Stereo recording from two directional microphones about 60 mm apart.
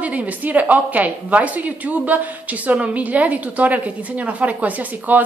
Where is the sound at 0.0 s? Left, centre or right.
Right.